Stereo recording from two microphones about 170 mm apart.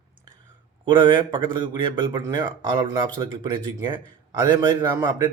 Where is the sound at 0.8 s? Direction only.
25° right (ahead or behind).